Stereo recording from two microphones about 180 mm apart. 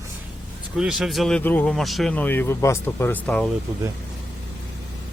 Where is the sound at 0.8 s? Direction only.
5° right (ahead or behind).